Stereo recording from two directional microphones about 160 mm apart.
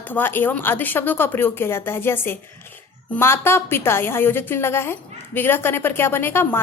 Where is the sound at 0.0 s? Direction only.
10° left (ahead or behind).